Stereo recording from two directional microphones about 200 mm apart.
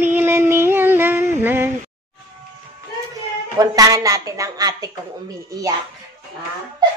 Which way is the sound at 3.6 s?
15° right (ahead or behind).